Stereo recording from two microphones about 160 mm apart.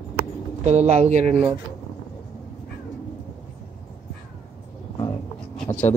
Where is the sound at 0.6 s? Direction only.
45° right (ahead or behind).